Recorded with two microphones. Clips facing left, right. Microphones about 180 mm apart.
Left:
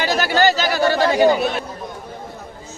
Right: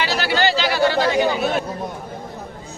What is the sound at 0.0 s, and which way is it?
Chatter, 45° left (ahead or behind).